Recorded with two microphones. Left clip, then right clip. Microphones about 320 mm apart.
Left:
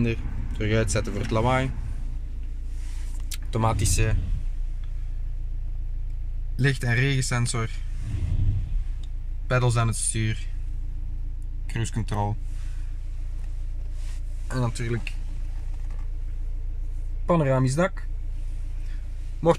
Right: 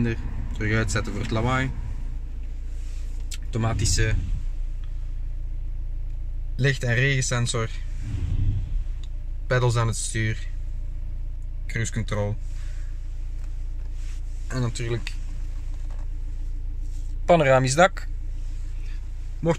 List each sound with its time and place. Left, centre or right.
0.0 s speech: centre
3.3 s speech: centre
6.5 s a man's voice: centre
9.5 s a man's voice: centre
11.6 s speech: centre
14.5 s speech: centre
17.3 s speech: right